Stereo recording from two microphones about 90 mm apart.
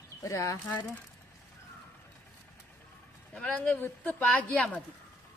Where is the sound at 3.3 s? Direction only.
10° left (ahead or behind).